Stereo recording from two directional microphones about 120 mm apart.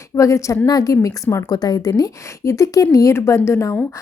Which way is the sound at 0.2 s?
25° left (ahead or behind).